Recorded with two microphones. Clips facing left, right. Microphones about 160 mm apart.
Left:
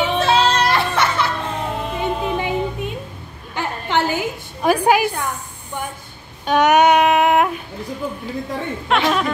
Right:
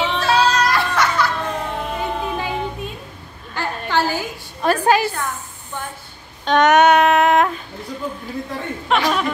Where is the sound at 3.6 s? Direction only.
20° left (ahead or behind).